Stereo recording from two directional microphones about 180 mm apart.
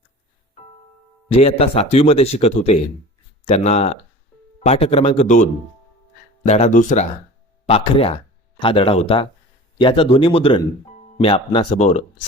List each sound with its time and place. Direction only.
1.3 s speech: 35° left (ahead or behind)